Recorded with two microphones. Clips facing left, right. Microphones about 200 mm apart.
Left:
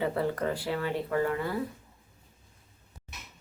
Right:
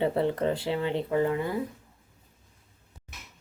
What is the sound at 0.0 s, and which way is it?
Speech, 25° right (ahead or behind).